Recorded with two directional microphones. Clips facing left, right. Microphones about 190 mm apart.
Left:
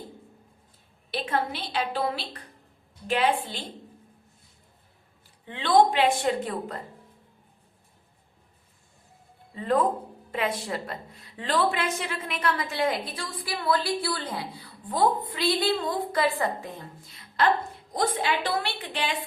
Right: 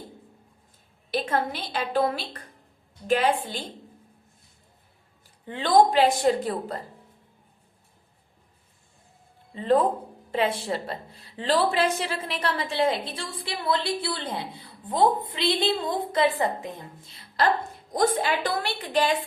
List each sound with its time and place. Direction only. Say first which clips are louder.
1.1 s a woman's voice: right 2 dB; 45° right (ahead or behind)
5.5 s a woman's voice: right 1 dB; 40° right (ahead or behind)
9.6 s a woman's voice: right 3 dB; 30° right (ahead or behind)
17.2 s a woman's voice: even; 40° right (ahead or behind)